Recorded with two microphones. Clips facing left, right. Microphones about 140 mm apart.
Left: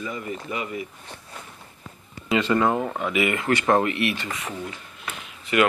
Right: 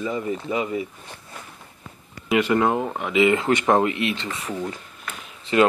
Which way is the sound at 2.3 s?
15° right (ahead or behind).